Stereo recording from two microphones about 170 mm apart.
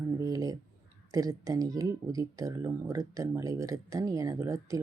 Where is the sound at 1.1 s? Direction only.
20° right (ahead or behind).